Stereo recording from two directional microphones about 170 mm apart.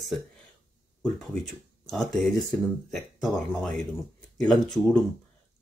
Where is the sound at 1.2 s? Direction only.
Centre (ahead or behind).